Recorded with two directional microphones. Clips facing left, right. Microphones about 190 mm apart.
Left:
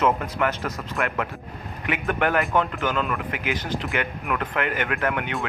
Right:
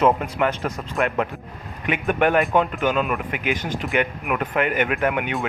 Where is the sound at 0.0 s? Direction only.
20° right (ahead or behind).